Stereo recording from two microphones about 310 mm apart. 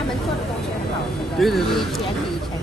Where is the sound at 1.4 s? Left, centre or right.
Centre.